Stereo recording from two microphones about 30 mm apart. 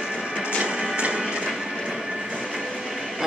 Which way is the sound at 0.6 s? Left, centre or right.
Right.